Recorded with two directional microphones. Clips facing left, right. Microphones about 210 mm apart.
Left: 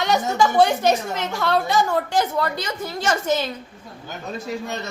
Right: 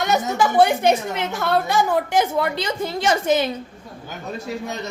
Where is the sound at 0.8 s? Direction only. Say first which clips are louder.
Right 1 dB; 15° right (ahead or behind).